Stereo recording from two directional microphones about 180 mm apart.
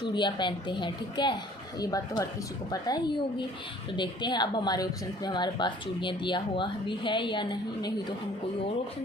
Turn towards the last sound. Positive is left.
turn(degrees=25)  # may be behind; listen again after turning